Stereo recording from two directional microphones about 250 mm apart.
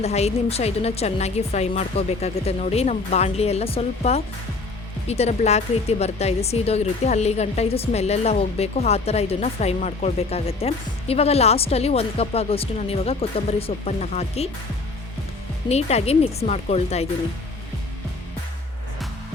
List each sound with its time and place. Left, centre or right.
0.0 s speech: left
15.7 s speech: left